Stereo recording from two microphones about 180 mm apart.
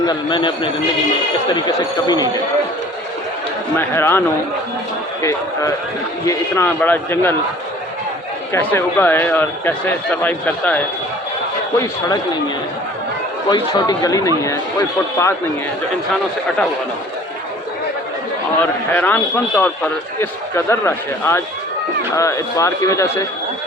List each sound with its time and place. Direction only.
0.0 s a man's voice: 25° left (ahead or behind)
3.8 s a man's voice: 15° left (ahead or behind)
6.2 s a man's voice: 10° left (ahead or behind)
8.5 s a man's voice: 15° left (ahead or behind)
13.5 s a man's voice: 20° left (ahead or behind)
18.9 s a man's voice: 10° left (ahead or behind)